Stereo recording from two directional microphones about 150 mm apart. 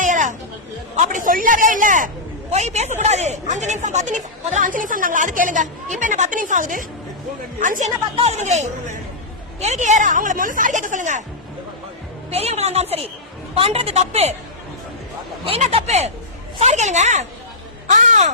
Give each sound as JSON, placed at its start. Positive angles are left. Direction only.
{"t": 0.0, "sound": "chatter", "side_deg": -55}
{"t": 0.9, "sound": "speech", "side_deg": -60}
{"t": 2.5, "sound": "speech", "side_deg": -45}
{"t": 8.2, "sound": "a woman's voice", "side_deg": -50}
{"t": 12.3, "sound": "a woman's voice", "side_deg": -45}
{"t": 15.4, "sound": "a woman's voice", "side_deg": -45}